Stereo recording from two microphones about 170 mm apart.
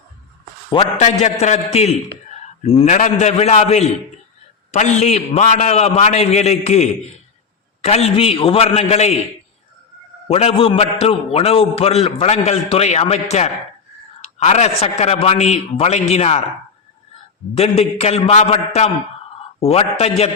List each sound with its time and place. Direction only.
0.7 s a man's voice: 30° left (ahead or behind)
1.2 s a man's voice: 40° left (ahead or behind)
10.2 s a man's voice: 35° left (ahead or behind)
17.6 s a man's voice: 35° left (ahead or behind)